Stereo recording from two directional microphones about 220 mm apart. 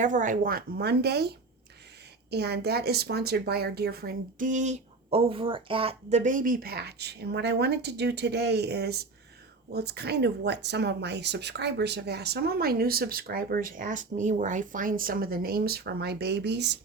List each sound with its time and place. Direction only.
0.0 s speech: 35° right (ahead or behind); by 16.7 s 50° right (ahead or behind)